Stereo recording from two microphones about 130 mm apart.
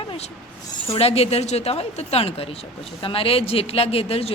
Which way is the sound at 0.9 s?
50° left (ahead or behind).